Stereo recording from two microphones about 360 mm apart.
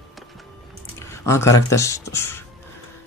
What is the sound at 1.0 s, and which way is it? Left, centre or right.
Speech, centre.